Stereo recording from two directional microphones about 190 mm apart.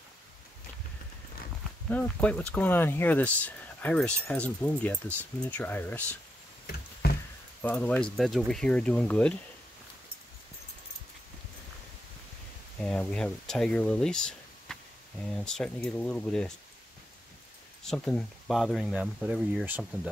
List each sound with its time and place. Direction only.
1.9 s speech: 5° left (ahead or behind)
7.0 s a sound: 55° left (ahead or behind)
7.6 s speech: 10° left (ahead or behind)
12.8 s speech: 5° left (ahead or behind)
17.8 s speech: 5° left (ahead or behind)